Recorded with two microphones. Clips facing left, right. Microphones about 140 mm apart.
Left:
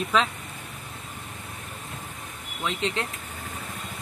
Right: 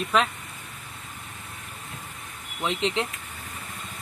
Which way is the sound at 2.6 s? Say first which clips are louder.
Right 2 dB; 20° right (ahead or behind).